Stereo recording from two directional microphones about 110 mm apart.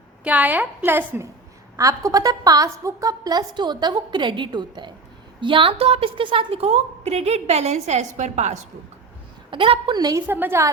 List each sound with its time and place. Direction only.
0.3 s a woman's voice: 15° right (ahead or behind)
1.7 s a woman's voice: 30° right (ahead or behind); by 8.5 s 90° right
9.5 s a woman's voice: 50° right (ahead or behind); by 10.2 s 35° right (ahead or behind)
10.2 s a woman's voice: 15° right (ahead or behind)